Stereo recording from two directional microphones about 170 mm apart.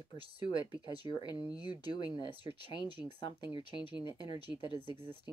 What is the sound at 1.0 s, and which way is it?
Speech, 25° left (ahead or behind).